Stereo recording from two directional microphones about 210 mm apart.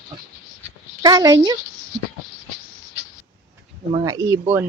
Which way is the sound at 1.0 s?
20° right (ahead or behind).